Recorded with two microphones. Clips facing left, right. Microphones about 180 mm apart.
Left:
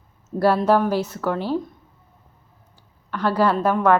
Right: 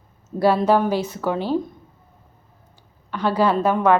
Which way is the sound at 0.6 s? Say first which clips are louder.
Even; 5° left (ahead or behind).